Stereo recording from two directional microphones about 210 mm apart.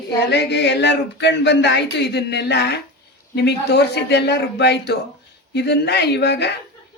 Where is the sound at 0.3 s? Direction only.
55° left (ahead or behind).